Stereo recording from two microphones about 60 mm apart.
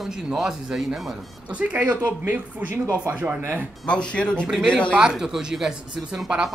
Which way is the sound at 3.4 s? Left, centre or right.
Right.